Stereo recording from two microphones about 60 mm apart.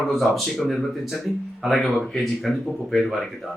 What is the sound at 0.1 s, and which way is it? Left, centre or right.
Speech, centre.